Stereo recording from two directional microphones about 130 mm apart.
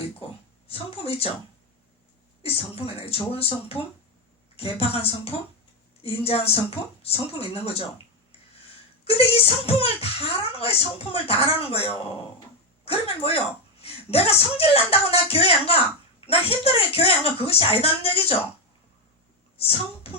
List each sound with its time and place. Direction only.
0.7 s speech: 50° left (ahead or behind)
2.4 s speech: 50° left (ahead or behind)
9.0 s speech: 50° left (ahead or behind)
19.5 s a sound: 50° left (ahead or behind)